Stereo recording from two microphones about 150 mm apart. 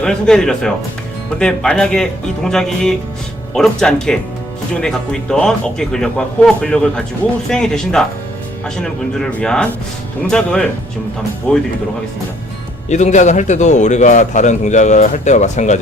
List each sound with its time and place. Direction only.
0.0 s speech: 5° left (ahead or behind)
12.9 s a man's voice: 50° left (ahead or behind)